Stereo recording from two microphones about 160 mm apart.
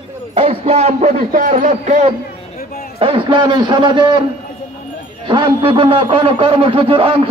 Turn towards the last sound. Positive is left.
turn(degrees=-35)  # may be behind; listen again after turning